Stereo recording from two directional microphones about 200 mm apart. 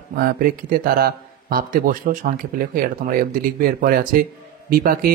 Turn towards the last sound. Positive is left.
turn(degrees=-50)  # may be behind; listen again after turning